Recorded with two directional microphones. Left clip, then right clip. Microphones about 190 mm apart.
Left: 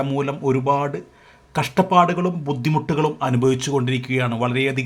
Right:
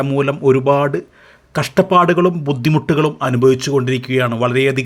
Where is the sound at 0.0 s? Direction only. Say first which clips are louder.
Right 7 dB; 15° right (ahead or behind).